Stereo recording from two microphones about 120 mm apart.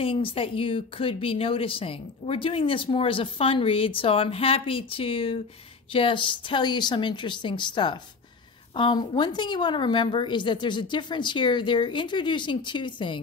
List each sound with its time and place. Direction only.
0.0 s a woman's voice: 50° left (ahead or behind)